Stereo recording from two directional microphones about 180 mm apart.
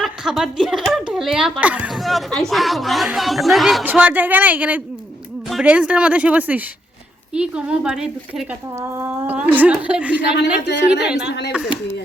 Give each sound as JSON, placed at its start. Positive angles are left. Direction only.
{"t": 0.0, "sound": "a woman's voice", "side_deg": 0}
{"t": 10.3, "sound": "a woman's voice", "side_deg": 70}
{"t": 11.0, "sound": "speech", "side_deg": -5}
{"t": 11.3, "sound": "a woman's voice", "side_deg": 70}